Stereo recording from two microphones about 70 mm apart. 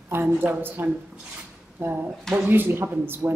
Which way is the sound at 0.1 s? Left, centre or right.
Right.